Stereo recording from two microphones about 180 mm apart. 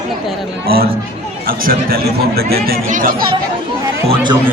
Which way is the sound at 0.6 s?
55° right (ahead or behind).